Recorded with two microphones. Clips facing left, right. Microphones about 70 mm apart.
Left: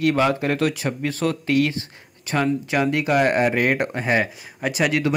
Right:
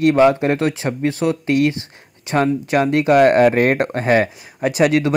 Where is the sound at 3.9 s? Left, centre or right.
Right.